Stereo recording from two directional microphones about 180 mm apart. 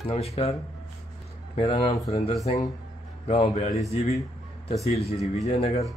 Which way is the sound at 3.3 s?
30° left (ahead or behind).